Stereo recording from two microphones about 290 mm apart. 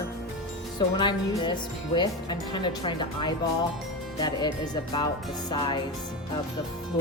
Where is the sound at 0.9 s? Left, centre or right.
Centre.